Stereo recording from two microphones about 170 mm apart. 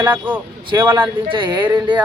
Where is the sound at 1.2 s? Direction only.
30° right (ahead or behind).